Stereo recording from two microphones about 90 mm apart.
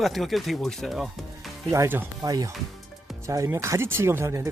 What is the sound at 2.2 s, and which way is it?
Speech, 45° right (ahead or behind).